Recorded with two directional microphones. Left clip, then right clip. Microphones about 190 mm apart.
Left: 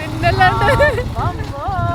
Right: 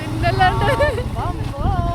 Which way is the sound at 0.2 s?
20° left (ahead or behind).